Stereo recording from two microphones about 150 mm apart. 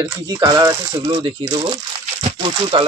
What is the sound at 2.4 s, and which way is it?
Speech, 30° right (ahead or behind).